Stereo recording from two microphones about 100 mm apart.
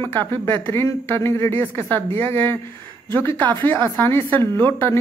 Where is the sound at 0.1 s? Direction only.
20° left (ahead or behind).